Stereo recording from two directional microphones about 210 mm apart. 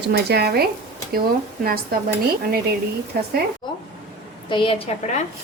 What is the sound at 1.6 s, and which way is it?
Speech, 45° right (ahead or behind).